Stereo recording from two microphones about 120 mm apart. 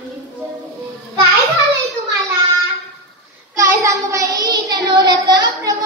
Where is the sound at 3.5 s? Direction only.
25° right (ahead or behind).